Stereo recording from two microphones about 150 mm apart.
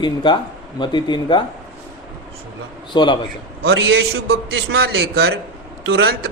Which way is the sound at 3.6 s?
90° right.